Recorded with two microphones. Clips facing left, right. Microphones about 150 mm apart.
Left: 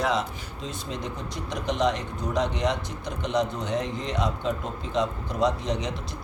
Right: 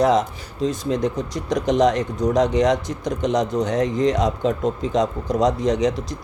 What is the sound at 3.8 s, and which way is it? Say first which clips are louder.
Speech: right 11 dB; 90° right.